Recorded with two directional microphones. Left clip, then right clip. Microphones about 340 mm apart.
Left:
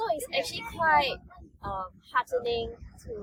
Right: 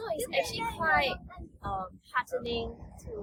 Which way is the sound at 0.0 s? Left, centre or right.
Centre.